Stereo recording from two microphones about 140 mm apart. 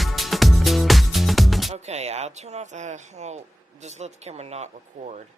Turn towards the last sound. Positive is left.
turn(degrees=-55)  # may be behind; listen again after turning